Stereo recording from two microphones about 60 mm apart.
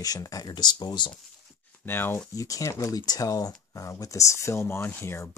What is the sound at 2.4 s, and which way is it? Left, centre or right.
Speech, left.